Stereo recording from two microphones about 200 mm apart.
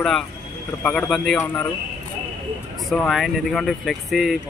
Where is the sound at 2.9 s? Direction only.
Centre (ahead or behind).